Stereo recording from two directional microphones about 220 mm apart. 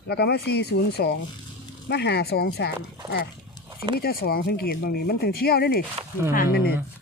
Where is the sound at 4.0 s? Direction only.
45° left (ahead or behind).